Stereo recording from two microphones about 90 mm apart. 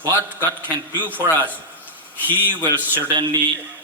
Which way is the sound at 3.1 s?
60° right (ahead or behind).